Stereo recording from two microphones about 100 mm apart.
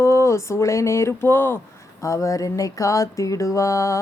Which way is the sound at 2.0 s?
30° left (ahead or behind).